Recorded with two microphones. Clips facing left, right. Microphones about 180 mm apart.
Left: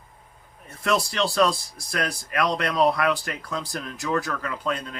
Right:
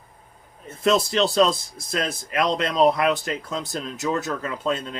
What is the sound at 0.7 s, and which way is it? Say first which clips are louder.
Speech: right 4 dB; 20° right (ahead or behind).